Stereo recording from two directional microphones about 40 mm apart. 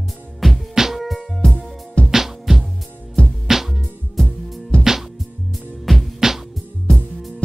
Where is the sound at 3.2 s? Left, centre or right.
Left.